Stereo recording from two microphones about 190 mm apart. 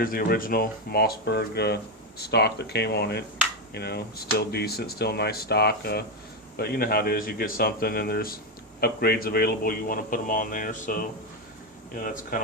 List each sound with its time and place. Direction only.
0.0 s speech: 50° left (ahead or behind)